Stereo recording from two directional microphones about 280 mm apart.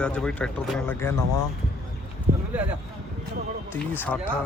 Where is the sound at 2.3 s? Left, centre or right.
Right.